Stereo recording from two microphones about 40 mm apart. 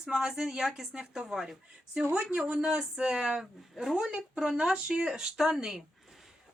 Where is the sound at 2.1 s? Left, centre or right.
Right.